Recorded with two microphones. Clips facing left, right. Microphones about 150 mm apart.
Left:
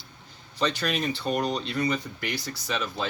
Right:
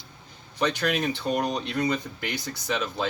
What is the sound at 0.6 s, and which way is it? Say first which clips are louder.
Speech: right 2 dB; 15° right (ahead or behind).